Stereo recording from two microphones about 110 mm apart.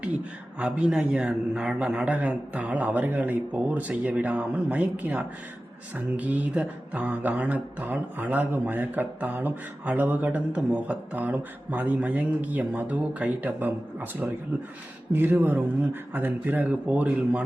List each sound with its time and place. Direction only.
0.0 s speech: 10° right (ahead or behind)